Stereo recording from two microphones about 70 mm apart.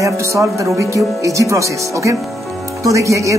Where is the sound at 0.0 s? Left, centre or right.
Right.